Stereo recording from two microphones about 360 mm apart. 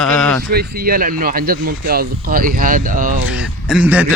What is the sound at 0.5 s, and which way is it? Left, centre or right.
Speech, right.